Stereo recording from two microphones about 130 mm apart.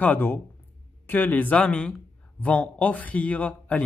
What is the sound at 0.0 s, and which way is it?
A man's voice, 15° left (ahead or behind).